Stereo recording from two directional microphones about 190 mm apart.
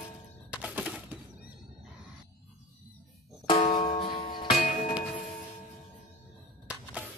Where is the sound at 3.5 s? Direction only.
30° left (ahead or behind).